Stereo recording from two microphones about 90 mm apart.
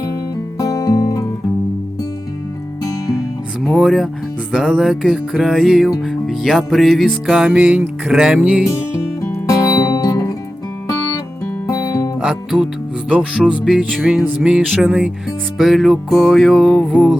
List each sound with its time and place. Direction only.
0.6 s music: 40° left (ahead or behind)
3.6 s music: centre (ahead or behind)
9.5 s music: 40° left (ahead or behind)
12.2 s music: 5° right (ahead or behind)
13.9 s music: centre (ahead or behind)